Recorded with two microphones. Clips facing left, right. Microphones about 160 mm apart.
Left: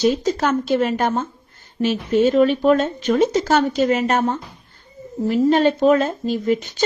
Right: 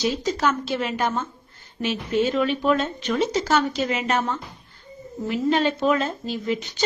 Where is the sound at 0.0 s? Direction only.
50° left (ahead or behind).